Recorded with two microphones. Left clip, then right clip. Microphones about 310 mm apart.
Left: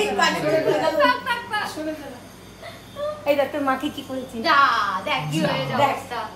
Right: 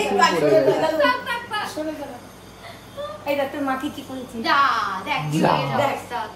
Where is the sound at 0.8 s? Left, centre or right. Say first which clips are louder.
Even; centre.